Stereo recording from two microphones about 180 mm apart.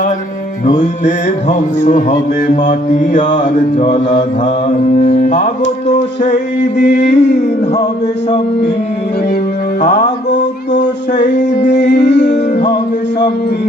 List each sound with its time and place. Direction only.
0.6 s music: 45° left (ahead or behind)
4.9 s music: 40° left (ahead or behind)
6.8 s music: 70° left (ahead or behind)
11.3 s music: 70° left (ahead or behind)